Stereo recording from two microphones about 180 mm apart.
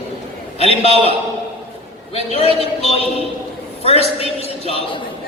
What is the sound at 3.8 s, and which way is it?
A man's voice, 35° left (ahead or behind).